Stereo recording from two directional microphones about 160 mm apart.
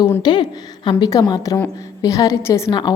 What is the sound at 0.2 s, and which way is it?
A woman's voice, 30° left (ahead or behind).